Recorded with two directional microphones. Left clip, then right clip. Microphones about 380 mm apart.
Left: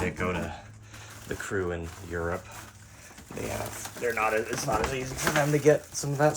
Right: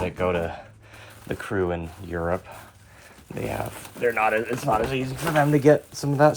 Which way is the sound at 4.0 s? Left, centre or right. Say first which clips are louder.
Right 5 dB; centre.